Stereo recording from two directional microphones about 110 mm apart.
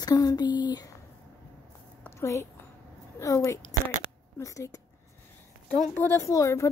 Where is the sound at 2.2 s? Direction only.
25° left (ahead or behind).